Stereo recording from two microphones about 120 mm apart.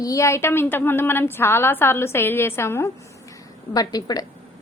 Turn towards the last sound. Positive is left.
turn(degrees=30)  # may be behind; listen again after turning